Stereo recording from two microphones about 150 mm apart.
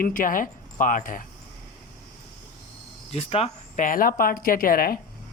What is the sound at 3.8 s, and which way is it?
Speech, 70° left (ahead or behind).